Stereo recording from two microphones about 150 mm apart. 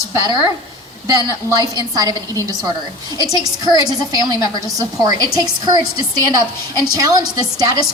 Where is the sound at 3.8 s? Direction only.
25° right (ahead or behind).